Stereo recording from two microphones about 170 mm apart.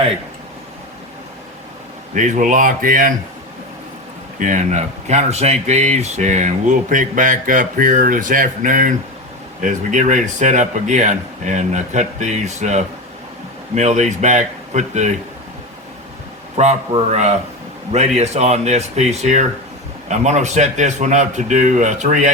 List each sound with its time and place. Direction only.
2.1 s speech: 45° right (ahead or behind)
4.4 s speech: 45° right (ahead or behind)
16.6 s speech: 40° right (ahead or behind)